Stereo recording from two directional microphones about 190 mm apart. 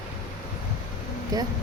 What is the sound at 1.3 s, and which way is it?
Speech, 20° right (ahead or behind).